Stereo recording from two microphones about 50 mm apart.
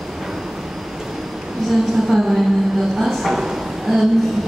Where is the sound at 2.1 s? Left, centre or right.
Centre.